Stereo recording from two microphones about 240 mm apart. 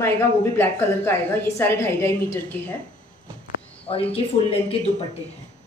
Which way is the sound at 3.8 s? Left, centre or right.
Left.